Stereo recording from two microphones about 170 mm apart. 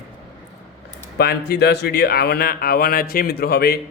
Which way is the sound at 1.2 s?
70° left (ahead or behind).